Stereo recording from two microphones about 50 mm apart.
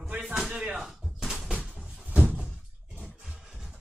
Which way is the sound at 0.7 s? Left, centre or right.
Centre.